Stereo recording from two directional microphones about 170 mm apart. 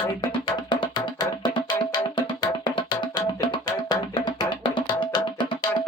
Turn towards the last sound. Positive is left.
turn(degrees=25)  # may be behind; listen again after turning